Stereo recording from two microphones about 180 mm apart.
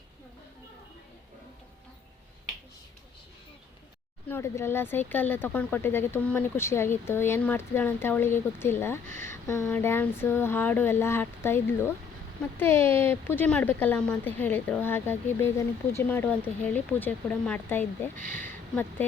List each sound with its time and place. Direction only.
4.3 s speech: 15° left (ahead or behind)
9.0 s speech: 45° right (ahead or behind)
9.3 s speech: 15° left (ahead or behind)
18.2 s speech: 50° right (ahead or behind)